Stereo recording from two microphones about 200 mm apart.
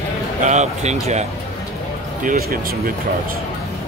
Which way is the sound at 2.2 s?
45° right (ahead or behind).